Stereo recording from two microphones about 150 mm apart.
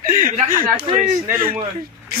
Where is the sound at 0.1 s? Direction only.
65° right (ahead or behind).